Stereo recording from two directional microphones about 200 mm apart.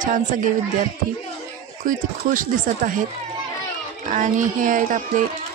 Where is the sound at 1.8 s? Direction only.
40° right (ahead or behind).